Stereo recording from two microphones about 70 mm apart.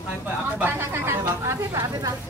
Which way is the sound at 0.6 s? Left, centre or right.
Right.